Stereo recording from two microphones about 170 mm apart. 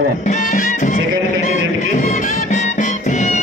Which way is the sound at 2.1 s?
45° left (ahead or behind).